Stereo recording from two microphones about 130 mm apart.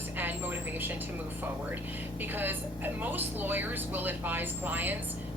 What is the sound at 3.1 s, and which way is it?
Speech, 15° right (ahead or behind).